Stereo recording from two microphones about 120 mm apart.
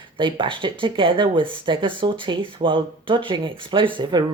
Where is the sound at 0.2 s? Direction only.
45° right (ahead or behind).